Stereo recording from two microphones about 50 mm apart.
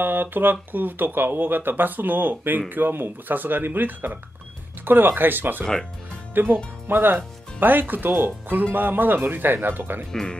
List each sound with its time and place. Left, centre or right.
0.0 s speech: right